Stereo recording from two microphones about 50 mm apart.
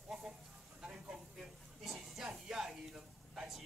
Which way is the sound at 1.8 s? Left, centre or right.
Centre.